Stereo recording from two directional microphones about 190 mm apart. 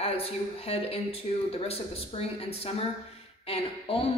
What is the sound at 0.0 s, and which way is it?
Speech, 30° left (ahead or behind).